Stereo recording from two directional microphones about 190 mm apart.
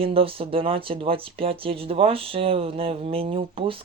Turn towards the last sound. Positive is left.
turn(degrees=-30)  # may be behind; listen again after turning